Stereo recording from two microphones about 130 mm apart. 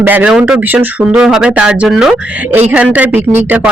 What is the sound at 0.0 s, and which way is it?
Speech, 15° right (ahead or behind).